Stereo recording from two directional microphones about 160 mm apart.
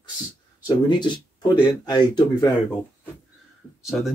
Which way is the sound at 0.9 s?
30° left (ahead or behind).